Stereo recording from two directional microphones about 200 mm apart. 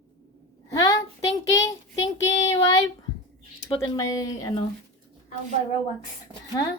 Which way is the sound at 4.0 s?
20° left (ahead or behind).